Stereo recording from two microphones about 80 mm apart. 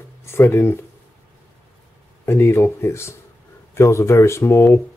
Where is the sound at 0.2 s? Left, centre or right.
Left.